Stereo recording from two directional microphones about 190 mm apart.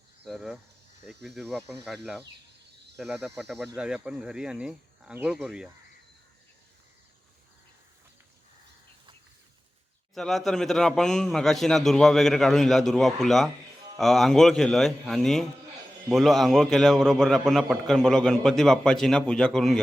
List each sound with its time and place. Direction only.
0.3 s a man's voice: centre (ahead or behind)
10.2 s a man's voice: centre (ahead or behind)